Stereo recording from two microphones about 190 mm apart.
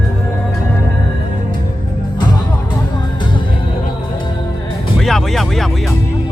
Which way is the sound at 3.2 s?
25° left (ahead or behind).